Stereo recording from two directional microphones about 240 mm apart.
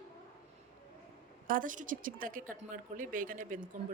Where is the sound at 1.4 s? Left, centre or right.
Right.